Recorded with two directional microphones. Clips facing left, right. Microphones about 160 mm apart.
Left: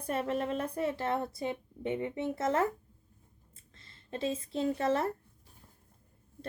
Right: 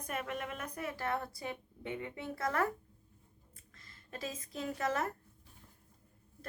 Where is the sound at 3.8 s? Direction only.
25° left (ahead or behind).